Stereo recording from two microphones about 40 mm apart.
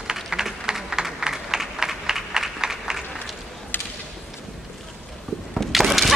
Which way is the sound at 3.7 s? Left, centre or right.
Left.